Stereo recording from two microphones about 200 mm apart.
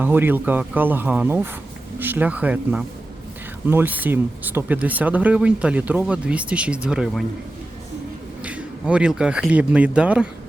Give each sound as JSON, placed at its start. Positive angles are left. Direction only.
{"t": 0.0, "sound": "speech", "side_deg": -10}
{"t": 8.4, "sound": "speech", "side_deg": -5}